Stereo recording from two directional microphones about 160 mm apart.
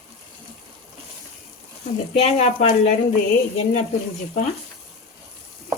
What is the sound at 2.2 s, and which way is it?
Speech, 40° left (ahead or behind).